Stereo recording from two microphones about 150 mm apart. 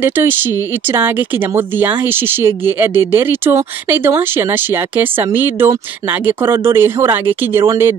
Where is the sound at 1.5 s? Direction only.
15° right (ahead or behind).